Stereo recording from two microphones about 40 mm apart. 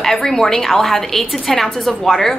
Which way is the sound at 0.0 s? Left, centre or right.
Centre.